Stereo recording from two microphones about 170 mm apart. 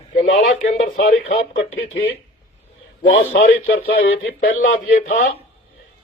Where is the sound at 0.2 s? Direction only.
45° left (ahead or behind).